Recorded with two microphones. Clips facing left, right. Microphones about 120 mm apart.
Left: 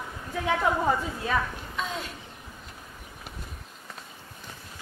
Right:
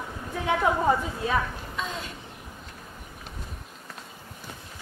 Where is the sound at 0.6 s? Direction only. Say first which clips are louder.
Right 3 dB; 10° right (ahead or behind).